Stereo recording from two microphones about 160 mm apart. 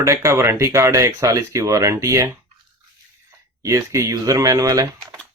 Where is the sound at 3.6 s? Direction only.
20° right (ahead or behind).